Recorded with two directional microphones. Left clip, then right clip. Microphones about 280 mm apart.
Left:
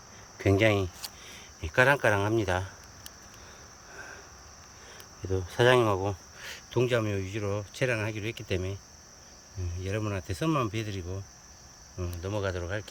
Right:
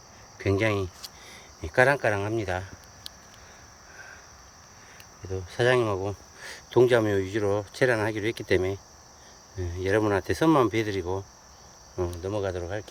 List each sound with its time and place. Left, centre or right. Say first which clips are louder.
0.3 s speech: left 1 dB; centre
3.9 s cricket: left 1 dB; left
5.3 s speech: left 1 dB; centre